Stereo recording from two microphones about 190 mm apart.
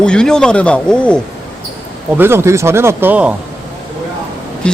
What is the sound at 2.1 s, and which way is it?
A man's voice, 10° right (ahead or behind).